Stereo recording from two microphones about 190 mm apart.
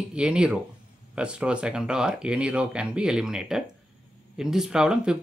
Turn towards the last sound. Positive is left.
turn(degrees=-5)  # may be behind; listen again after turning